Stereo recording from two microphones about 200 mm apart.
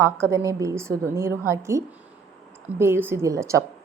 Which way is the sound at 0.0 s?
15° right (ahead or behind).